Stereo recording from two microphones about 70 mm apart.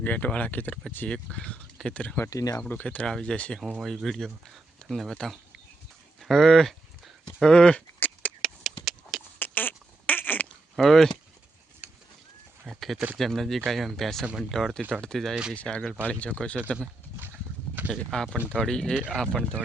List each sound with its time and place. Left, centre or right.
0.0 s speech: left
2.3 s speech: left
2.6 s speech: left
3.6 s speech: centre
6.1 s livestock: centre
7.4 s speech: centre
7.9 s a sound: left
8.4 s a sound: centre
9.4 s a sound: left
10.8 s speech: centre
12.6 s speech: centre
14.8 s speech: right
15.0 s speech: centre
17.9 s speech: centre